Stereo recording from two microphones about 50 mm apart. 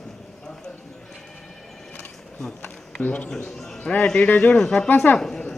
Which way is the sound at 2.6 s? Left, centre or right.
Left.